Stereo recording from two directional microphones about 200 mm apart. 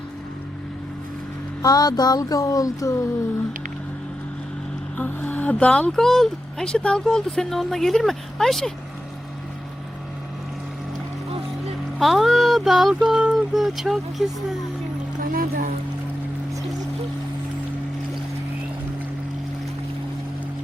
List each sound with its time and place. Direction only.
1.6 s speech: 20° left (ahead or behind)
4.9 s speech: 10° left (ahead or behind)
11.9 s speech: centre (ahead or behind)
15.2 s music: 45° right (ahead or behind)